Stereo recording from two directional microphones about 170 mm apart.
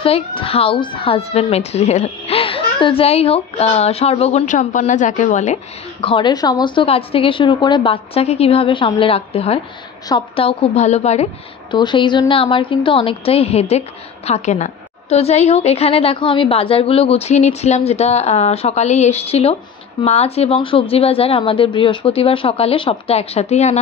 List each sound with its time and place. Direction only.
0.0 s a woman's voice: 30° left (ahead or behind)
11.7 s a woman's voice: 25° left (ahead or behind)